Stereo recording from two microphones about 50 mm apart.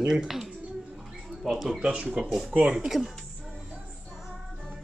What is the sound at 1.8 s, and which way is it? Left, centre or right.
Speech, right.